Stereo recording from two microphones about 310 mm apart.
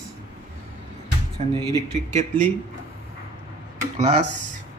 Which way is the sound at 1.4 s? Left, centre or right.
Right.